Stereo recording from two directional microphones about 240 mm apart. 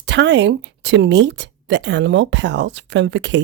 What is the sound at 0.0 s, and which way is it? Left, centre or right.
Speech, right.